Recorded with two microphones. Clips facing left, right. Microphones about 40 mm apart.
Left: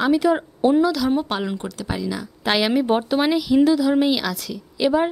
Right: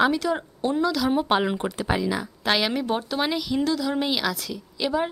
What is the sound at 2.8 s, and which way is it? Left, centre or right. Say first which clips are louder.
Speech: left 7 dB; left.